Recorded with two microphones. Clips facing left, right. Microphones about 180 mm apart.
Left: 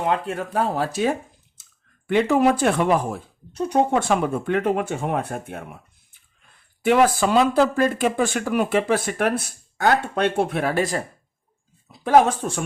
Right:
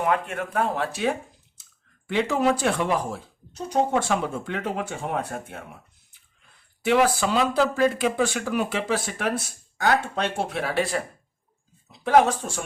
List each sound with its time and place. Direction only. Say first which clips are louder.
0.0 s speech: left 1 dB; 30° left (ahead or behind)
2.0 s speech: left 5 dB; 55° left (ahead or behind)
6.8 s speech: left 3 dB; 50° left (ahead or behind)
12.0 s speech: left 2 dB; 50° left (ahead or behind)